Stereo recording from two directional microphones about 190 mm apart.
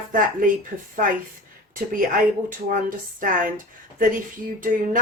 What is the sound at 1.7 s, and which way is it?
Speech, 50° right (ahead or behind).